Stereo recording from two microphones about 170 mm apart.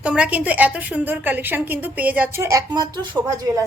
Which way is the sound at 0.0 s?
5° right (ahead or behind).